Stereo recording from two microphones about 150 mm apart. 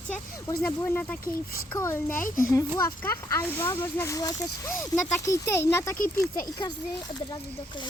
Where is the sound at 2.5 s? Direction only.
20° left (ahead or behind).